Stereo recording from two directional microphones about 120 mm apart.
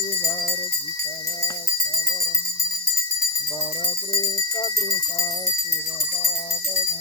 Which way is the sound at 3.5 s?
30° left (ahead or behind).